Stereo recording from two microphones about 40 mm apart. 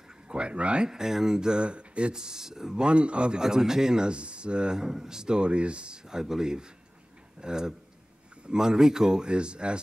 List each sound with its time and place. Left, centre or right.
0.3 s speech: right
0.8 s speech: centre
2.9 s a man's voice: right
3.3 s a man's voice: centre
6.0 s a man's voice: centre